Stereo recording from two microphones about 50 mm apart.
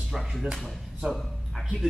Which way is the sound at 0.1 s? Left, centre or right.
Centre.